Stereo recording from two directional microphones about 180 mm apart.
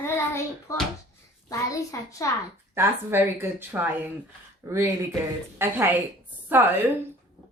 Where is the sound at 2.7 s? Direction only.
15° right (ahead or behind).